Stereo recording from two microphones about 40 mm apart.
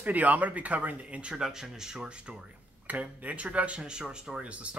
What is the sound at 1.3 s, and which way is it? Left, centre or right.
Speech, centre.